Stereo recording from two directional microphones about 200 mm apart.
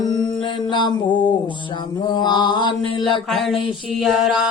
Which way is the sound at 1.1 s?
25° left (ahead or behind).